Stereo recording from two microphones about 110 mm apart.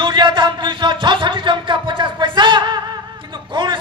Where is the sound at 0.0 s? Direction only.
45° right (ahead or behind).